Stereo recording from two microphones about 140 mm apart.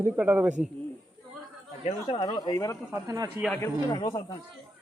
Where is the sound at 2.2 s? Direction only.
30° left (ahead or behind).